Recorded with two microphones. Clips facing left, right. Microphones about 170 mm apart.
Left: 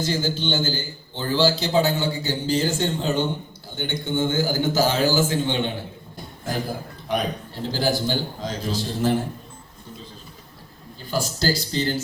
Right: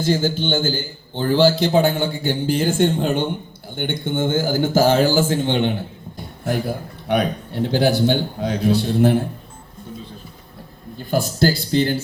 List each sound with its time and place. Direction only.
0.0 s a man's voice: 50° right (ahead or behind)
7.1 s a man's voice: 65° right (ahead or behind)
10.9 s a man's voice: 55° right (ahead or behind)